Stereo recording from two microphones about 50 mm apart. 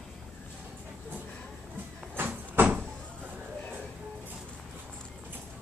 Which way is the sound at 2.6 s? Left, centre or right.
Right.